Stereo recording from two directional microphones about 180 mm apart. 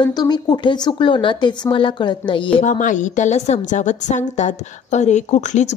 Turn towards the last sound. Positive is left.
turn(degrees=40)  # may be behind; listen again after turning